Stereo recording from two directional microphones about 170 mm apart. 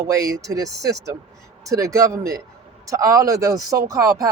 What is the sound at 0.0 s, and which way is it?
Speech, 20° right (ahead or behind).